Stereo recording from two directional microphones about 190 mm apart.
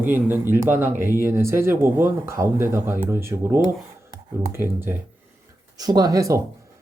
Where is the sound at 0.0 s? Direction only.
10° right (ahead or behind).